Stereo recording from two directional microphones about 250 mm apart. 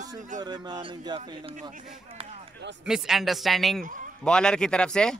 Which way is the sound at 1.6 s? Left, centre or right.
Right.